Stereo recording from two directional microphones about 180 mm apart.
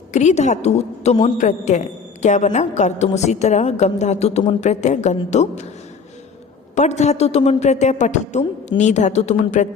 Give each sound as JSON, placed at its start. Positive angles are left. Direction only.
{"t": 0.1, "sound": "a woman's voice", "side_deg": 40}
{"t": 6.7, "sound": "a woman's voice", "side_deg": 40}